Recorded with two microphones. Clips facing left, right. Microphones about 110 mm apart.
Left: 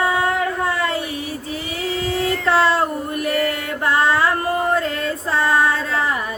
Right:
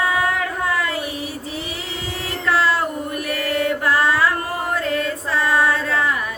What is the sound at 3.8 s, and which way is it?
Music, 25° left (ahead or behind).